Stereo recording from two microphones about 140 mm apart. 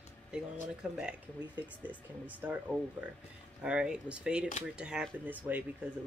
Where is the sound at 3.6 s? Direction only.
5° right (ahead or behind).